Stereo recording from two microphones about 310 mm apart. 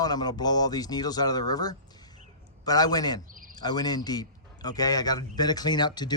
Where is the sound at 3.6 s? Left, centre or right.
Centre.